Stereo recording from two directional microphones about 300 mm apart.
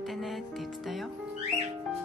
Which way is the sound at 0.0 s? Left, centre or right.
Centre.